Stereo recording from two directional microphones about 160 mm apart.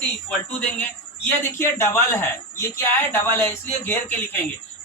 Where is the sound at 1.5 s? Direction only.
15° left (ahead or behind).